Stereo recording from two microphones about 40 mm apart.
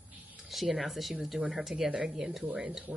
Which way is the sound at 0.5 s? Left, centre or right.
Centre.